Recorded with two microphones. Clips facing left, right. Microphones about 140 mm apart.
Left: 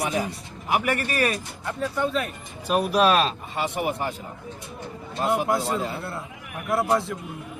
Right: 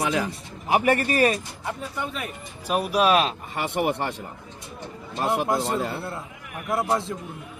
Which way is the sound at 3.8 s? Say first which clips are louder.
Right 2 dB; 75° right (ahead or behind).